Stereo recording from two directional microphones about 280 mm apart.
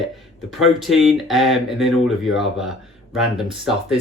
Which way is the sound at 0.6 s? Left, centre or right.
Centre.